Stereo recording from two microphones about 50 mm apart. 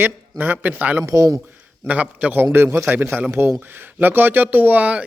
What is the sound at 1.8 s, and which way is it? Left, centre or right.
Speech, right.